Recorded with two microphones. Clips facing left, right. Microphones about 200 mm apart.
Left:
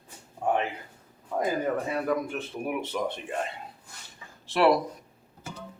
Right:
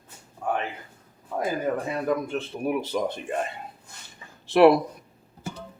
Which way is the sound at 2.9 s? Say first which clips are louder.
Right 2 dB; 35° right (ahead or behind).